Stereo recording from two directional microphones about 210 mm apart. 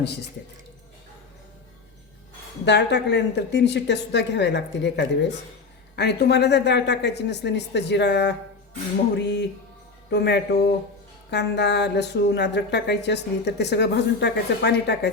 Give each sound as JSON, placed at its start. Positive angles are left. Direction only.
{"t": 2.6, "sound": "speech", "side_deg": 55}